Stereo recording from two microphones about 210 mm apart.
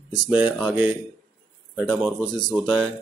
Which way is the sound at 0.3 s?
10° right (ahead or behind).